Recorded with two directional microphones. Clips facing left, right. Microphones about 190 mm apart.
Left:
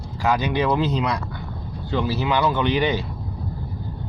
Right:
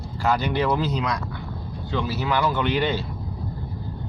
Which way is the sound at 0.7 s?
25° left (ahead or behind).